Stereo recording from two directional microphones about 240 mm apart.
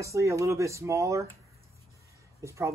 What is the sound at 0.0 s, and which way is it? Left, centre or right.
Speech, centre.